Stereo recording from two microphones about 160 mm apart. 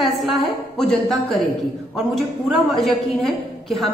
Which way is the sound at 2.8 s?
Centre (ahead or behind).